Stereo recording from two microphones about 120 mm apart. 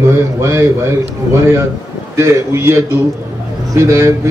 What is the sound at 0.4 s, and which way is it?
A man's voice, 20° right (ahead or behind).